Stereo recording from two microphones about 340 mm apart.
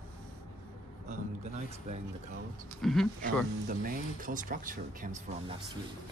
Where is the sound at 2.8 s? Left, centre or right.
Centre.